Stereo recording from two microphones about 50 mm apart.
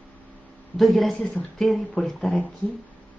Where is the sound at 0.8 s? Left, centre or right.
Centre.